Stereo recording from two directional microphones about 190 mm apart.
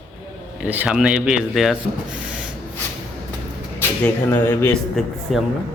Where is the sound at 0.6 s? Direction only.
10° right (ahead or behind).